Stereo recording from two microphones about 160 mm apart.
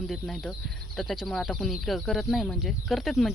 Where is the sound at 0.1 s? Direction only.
Centre (ahead or behind).